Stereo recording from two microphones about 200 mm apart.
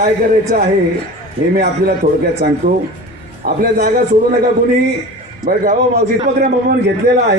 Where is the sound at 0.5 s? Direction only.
45° right (ahead or behind).